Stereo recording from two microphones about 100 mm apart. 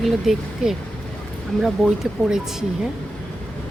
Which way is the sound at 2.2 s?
20° left (ahead or behind).